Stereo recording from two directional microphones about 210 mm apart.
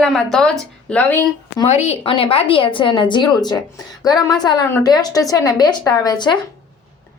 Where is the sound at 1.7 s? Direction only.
30° left (ahead or behind).